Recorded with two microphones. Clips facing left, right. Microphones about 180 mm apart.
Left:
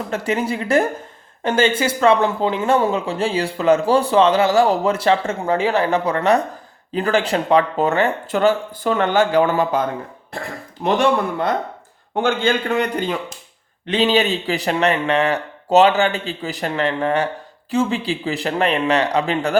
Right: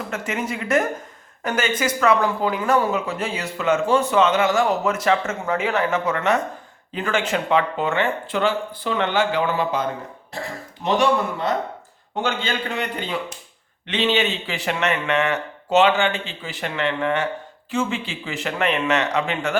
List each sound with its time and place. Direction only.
0.1 s speech: 30° left (ahead or behind)
12.1 s speech: 50° left (ahead or behind); by 19.5 s 35° left (ahead or behind)